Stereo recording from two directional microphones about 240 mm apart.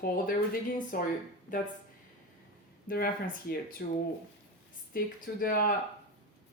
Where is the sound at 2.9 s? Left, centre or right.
Left.